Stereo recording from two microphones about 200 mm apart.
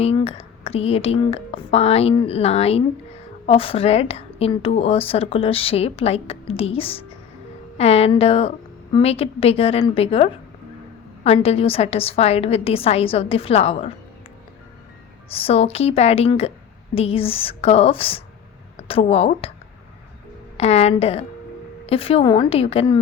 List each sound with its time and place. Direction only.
0.0 s a woman's voice: 30° left (ahead or behind)
15.4 s a woman's voice: 30° left (ahead or behind)
20.6 s a woman's voice: 30° left (ahead or behind)